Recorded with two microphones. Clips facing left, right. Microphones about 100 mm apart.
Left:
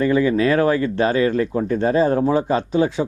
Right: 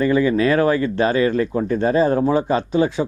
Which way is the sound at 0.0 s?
15° right (ahead or behind).